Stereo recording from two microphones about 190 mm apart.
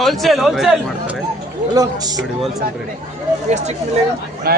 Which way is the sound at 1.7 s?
20° right (ahead or behind).